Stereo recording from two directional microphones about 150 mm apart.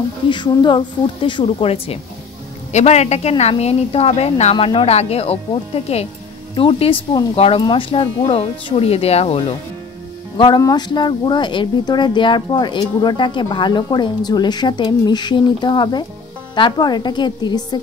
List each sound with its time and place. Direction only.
0.3 s a woman's voice: 30° left (ahead or behind)